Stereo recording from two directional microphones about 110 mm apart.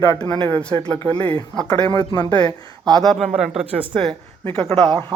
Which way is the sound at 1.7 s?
40° left (ahead or behind).